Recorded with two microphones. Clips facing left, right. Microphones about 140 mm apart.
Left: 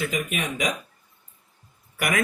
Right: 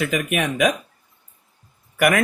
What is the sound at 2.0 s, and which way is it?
Speech, 60° right (ahead or behind).